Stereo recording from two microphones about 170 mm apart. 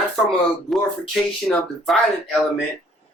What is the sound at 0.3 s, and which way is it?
Speech, centre (ahead or behind).